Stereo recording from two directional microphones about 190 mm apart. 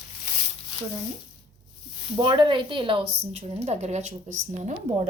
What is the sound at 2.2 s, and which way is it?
A woman's voice, 25° right (ahead or behind).